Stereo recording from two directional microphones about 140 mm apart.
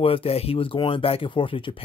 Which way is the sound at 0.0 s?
45° left (ahead or behind).